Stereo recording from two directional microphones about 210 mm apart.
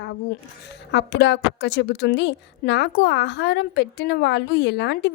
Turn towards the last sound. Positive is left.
turn(degrees=55)  # may be behind; listen again after turning